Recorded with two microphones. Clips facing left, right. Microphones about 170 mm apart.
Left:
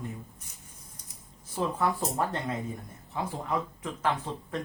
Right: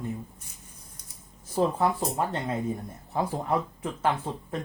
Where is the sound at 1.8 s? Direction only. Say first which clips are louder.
Right 3 dB; 20° right (ahead or behind).